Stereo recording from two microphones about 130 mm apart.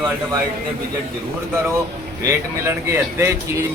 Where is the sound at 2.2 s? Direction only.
20° right (ahead or behind).